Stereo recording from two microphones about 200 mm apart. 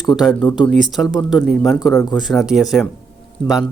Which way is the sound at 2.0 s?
20° left (ahead or behind).